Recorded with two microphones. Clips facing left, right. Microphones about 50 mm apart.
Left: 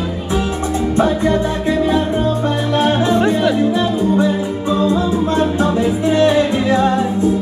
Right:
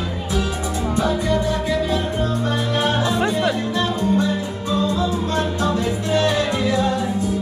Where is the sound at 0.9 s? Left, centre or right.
Left.